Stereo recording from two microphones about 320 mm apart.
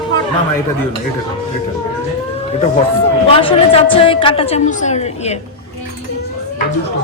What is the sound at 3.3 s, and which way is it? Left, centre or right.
A woman's voice, centre.